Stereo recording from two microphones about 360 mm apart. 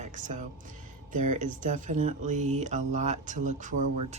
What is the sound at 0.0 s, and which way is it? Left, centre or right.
Music, right.